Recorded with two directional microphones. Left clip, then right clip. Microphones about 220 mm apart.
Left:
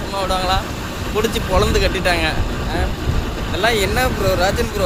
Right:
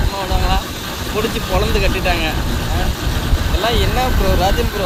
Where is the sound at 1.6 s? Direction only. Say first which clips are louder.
Left 1 dB; 20° left (ahead or behind).